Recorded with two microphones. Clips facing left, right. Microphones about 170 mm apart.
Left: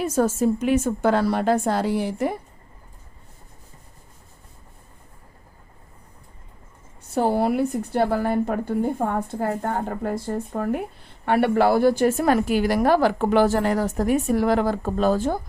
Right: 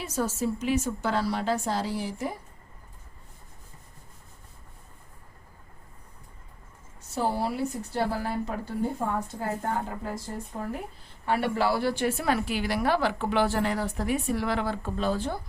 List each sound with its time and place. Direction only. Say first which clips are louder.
0.0 s speech: left 8 dB; 50° left (ahead or behind)
7.1 s a woman's voice: left 7 dB; 60° left (ahead or behind)